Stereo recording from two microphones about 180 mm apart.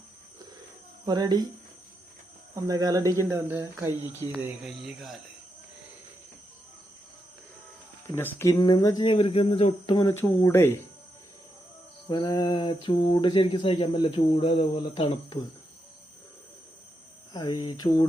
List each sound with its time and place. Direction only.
1.0 s speech: 20° right (ahead or behind)
2.6 s speech: 20° right (ahead or behind); by 5.2 s centre (ahead or behind)
8.1 s speech: 15° left (ahead or behind)
10.2 s speech: 15° left (ahead or behind)
12.0 s speech: 20° left (ahead or behind)
17.3 s speech: 25° left (ahead or behind)